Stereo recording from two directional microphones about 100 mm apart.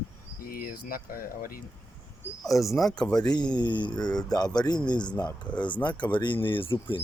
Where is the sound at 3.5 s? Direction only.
50° left (ahead or behind).